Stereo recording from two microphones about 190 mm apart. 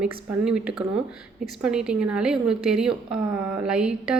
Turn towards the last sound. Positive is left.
turn(degrees=-5)  # may be behind; listen again after turning